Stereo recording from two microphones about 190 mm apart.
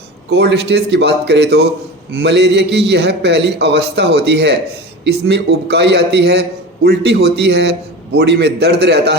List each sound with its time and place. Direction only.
0.3 s a man's voice: 65° right (ahead or behind)